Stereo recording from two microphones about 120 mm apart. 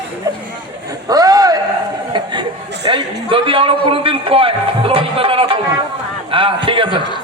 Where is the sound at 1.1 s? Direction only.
30° right (ahead or behind).